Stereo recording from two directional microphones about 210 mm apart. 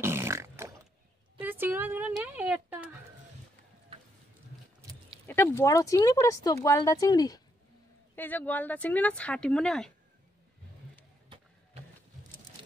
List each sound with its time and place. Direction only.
0.0 s a sound: 10° right (ahead or behind)
5.2 s speech: 10° left (ahead or behind)
11.2 s vehicle: 25° right (ahead or behind)